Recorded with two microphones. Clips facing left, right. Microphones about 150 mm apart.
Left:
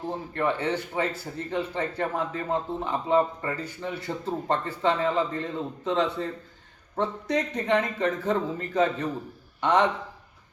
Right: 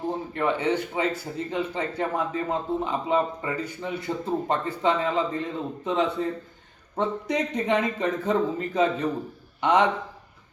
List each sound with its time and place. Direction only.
0.3 s a man's voice: 15° right (ahead or behind)